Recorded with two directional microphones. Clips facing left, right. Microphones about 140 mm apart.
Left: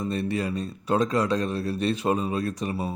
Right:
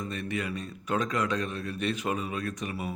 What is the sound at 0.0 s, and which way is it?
Speech, 35° left (ahead or behind).